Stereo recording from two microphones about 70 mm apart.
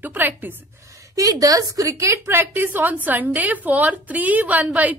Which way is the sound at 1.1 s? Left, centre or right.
Right.